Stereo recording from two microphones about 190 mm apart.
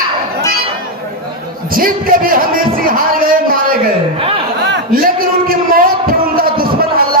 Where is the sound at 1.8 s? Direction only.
50° right (ahead or behind).